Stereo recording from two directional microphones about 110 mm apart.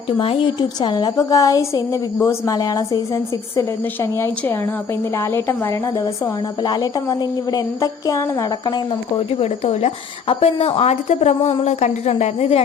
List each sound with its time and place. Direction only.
0.2 s a woman's voice: 55° left (ahead or behind)
0.8 s a woman's voice: 40° left (ahead or behind); by 6.3 s 20° left (ahead or behind)
6.6 s speech: 40° left (ahead or behind)
9.1 s a woman's voice: 60° left (ahead or behind)